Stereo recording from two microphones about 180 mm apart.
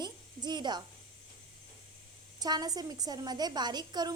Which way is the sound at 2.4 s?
20° right (ahead or behind).